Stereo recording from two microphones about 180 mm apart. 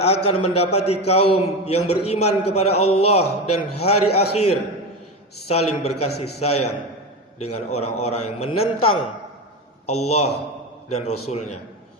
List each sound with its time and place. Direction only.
0.0 s a man's voice: 35° left (ahead or behind)
5.5 s a man's voice: 35° left (ahead or behind)
6.1 s a man's voice: 65° left (ahead or behind)
6.4 s a man's voice: 35° left (ahead or behind)